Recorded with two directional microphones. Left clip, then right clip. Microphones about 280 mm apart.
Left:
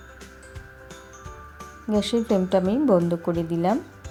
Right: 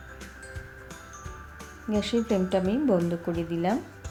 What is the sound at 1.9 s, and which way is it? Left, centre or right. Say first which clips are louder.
Speech: left 4 dB; left.